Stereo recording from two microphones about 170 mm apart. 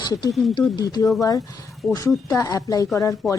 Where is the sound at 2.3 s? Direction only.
20° left (ahead or behind).